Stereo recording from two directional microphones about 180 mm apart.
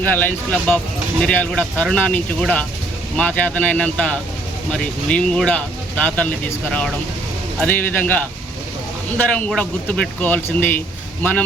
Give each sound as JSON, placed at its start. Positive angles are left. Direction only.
{"t": 0.0, "sound": "speech", "side_deg": 10}
{"t": 7.6, "sound": "speech", "side_deg": 10}